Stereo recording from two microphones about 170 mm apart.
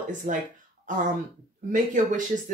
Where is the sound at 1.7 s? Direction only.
50° right (ahead or behind).